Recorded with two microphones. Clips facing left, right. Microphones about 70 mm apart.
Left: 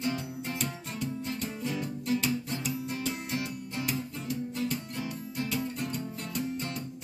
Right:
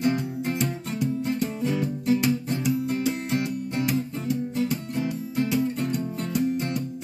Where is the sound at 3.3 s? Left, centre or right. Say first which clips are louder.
Right 8 dB; right.